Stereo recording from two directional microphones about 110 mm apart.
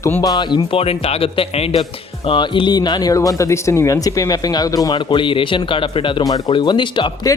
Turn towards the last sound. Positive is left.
turn(degrees=45)  # may be behind; listen again after turning